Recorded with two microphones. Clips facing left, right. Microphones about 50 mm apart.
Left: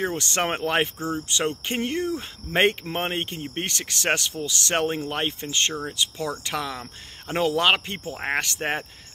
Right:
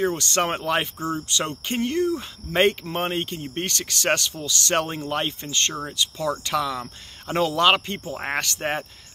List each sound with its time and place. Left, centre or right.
0.0 s speech: centre